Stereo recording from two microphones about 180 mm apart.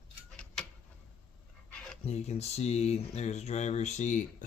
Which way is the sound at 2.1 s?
35° left (ahead or behind).